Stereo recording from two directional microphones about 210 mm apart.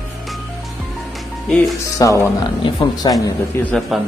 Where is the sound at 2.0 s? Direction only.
15° left (ahead or behind).